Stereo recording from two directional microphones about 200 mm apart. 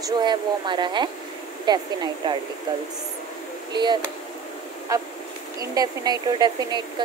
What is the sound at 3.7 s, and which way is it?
Speech, 20° right (ahead or behind).